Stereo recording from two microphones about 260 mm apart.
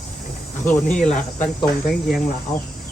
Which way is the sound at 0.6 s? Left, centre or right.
Centre.